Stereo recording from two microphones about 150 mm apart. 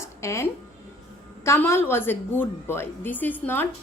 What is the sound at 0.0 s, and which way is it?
Music, 20° left (ahead or behind).